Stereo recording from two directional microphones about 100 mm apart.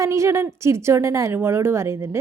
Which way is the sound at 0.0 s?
30° right (ahead or behind).